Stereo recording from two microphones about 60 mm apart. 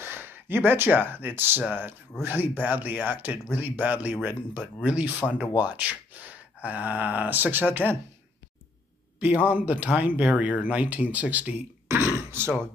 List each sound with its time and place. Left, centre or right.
0.0 s speech: right
9.2 s speech: right
12.3 s a sound: right